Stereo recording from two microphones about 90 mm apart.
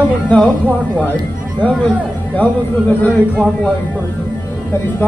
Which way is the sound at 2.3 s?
20° left (ahead or behind).